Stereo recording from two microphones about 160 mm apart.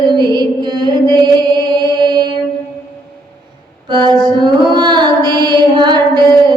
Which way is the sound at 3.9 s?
30° right (ahead or behind).